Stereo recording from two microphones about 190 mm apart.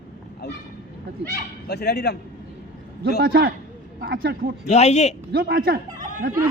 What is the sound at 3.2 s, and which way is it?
Speech, 50° right (ahead or behind).